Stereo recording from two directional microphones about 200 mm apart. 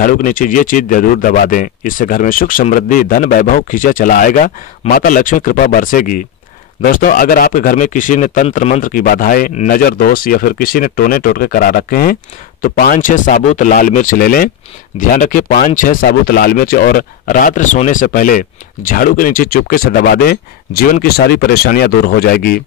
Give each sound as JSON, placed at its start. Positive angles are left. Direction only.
{"t": 0.0, "sound": "speech", "side_deg": 45}